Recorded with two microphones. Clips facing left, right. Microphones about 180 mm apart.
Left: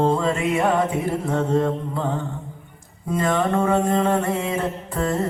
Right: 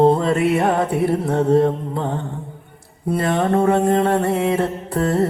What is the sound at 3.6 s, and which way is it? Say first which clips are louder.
Mantra: right 4 dB; 35° right (ahead or behind).